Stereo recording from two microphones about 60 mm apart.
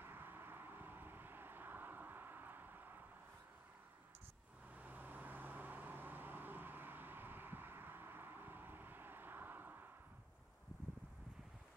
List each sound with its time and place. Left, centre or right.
0.0 s vehicle: right
4.7 s vehicle: right